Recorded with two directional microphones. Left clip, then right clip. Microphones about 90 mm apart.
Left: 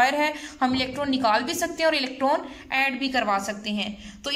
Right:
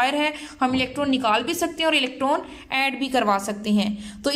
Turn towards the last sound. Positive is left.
turn(degrees=-50)  # may be behind; listen again after turning